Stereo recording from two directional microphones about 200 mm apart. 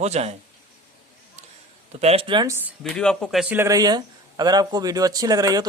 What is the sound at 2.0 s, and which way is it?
Speech, 30° right (ahead or behind).